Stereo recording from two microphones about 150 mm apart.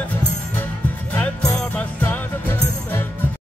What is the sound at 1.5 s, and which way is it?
Music, 10° left (ahead or behind).